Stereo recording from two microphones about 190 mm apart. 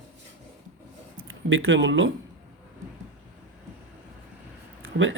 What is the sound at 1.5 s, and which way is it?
Speech, 85° right.